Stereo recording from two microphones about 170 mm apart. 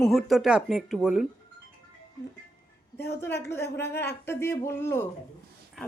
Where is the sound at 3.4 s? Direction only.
15° left (ahead or behind).